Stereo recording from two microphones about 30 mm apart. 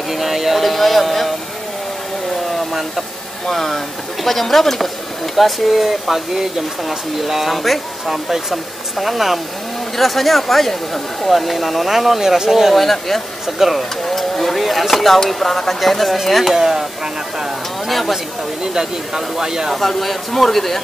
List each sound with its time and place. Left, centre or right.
0.1 s a sound: centre
2.4 s a sound: centre
3.4 s speech: centre
8.1 s speech: centre
12.7 s speech: centre
16.5 s speech: centre
17.8 s speech: centre
18.1 s speech: right
19.7 s speech: centre